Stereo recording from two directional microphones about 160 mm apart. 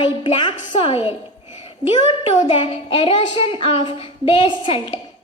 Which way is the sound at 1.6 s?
35° left (ahead or behind).